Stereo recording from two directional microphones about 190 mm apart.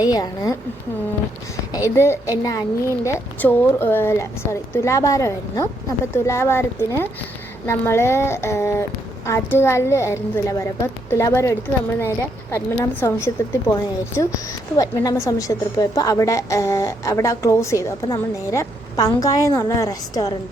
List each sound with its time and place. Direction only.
0.0 s a woman's voice: 20° left (ahead or behind)
2.0 s a woman's voice: 15° left (ahead or behind)
14.8 s a woman's voice: 20° left (ahead or behind)